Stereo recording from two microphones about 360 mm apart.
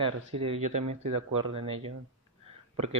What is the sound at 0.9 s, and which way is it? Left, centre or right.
Speech, right.